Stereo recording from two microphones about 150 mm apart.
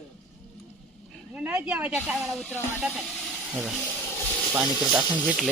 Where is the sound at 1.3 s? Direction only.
10° right (ahead or behind).